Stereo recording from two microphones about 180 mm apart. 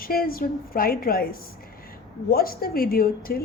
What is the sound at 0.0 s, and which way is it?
A woman's voice, 55° left (ahead or behind).